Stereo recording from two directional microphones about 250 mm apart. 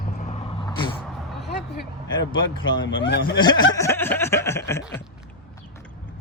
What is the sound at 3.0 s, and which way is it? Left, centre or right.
Speech, left.